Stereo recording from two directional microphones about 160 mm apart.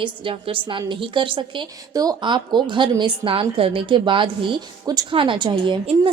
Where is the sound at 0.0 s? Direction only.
35° right (ahead or behind).